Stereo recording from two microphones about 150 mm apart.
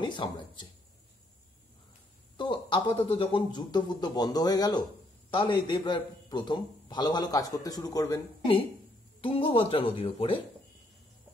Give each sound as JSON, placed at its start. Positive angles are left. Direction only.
{"t": 0.0, "sound": "speech", "side_deg": 30}
{"t": 2.3, "sound": "a man's voice", "side_deg": 35}
{"t": 9.2, "sound": "speech", "side_deg": 35}